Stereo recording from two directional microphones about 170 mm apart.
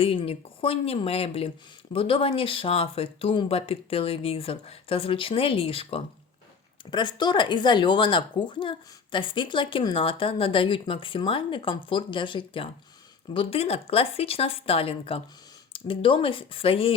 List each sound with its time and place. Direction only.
0.0 s speech: 35° left (ahead or behind)